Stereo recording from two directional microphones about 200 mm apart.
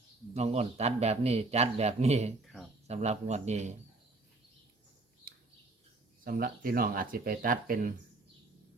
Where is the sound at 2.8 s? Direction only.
35° right (ahead or behind).